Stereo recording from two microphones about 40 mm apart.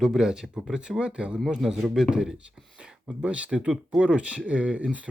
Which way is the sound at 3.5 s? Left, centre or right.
Right.